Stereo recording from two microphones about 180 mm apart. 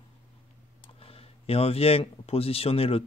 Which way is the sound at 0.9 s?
35° left (ahead or behind).